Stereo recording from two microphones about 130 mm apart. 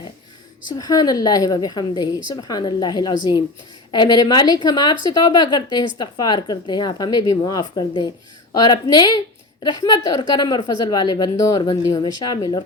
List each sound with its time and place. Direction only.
0.7 s a woman's voice: 30° left (ahead or behind)